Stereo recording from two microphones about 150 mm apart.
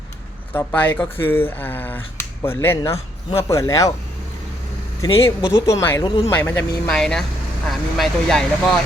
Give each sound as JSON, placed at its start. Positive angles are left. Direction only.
{"t": 0.5, "sound": "a man's voice", "side_deg": 10}
{"t": 5.4, "sound": "speech", "side_deg": -5}
{"t": 5.6, "sound": "a man's voice", "side_deg": 20}
{"t": 6.9, "sound": "speech", "side_deg": 5}